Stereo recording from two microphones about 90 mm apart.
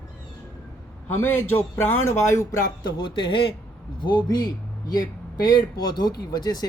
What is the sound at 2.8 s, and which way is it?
Speech, 60° left (ahead or behind).